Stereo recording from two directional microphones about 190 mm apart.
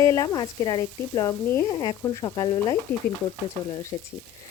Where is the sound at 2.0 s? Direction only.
20° left (ahead or behind).